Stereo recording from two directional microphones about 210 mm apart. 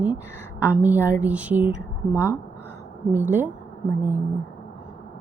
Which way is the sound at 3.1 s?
10° right (ahead or behind).